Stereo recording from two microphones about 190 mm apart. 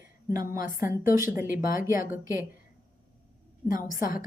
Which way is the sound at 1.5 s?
50° left (ahead or behind).